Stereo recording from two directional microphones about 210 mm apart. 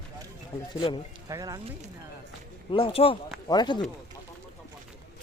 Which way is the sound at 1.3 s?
15° right (ahead or behind).